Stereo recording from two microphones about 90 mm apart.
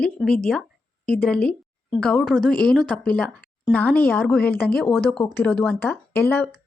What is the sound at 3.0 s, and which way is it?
A woman's voice, 10° left (ahead or behind).